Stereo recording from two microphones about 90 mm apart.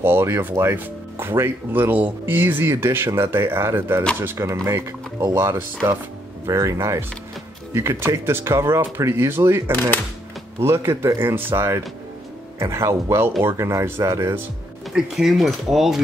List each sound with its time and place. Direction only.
0.0 s speech: 25° right (ahead or behind)
10.6 s speech: 30° right (ahead or behind)
14.9 s speech: 5° right (ahead or behind)